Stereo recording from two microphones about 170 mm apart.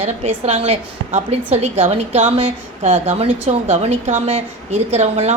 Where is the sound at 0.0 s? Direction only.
40° right (ahead or behind).